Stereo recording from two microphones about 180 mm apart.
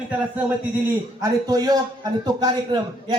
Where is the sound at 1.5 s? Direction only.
20° right (ahead or behind).